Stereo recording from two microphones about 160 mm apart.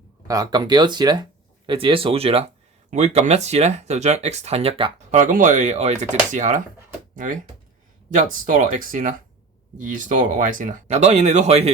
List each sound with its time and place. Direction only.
0.3 s speech: 25° right (ahead or behind)
5.1 s speech: 55° right (ahead or behind)
8.1 s speech: 55° right (ahead or behind)